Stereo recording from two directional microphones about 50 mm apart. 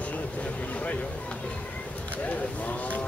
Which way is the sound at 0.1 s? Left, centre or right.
Left.